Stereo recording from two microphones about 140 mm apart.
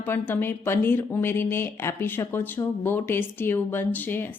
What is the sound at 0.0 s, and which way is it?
Speech, 15° left (ahead or behind).